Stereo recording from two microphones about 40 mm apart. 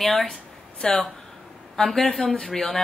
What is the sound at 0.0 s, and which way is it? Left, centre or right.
Speech, centre.